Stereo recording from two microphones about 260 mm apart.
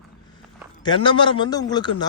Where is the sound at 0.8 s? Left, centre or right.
Centre.